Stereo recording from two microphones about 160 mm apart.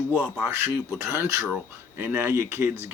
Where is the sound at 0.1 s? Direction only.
10° right (ahead or behind).